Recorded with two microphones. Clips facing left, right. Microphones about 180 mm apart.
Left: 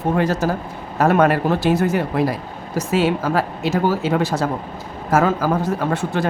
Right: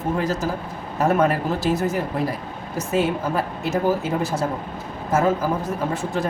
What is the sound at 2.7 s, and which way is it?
Speech, 90° left.